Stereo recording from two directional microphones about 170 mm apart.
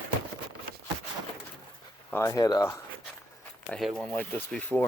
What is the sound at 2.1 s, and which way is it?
Speech, 15° left (ahead or behind).